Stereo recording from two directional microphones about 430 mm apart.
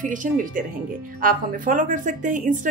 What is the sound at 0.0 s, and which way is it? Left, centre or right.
A woman's voice, centre.